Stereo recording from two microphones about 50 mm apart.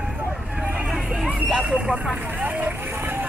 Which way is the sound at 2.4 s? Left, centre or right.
Right.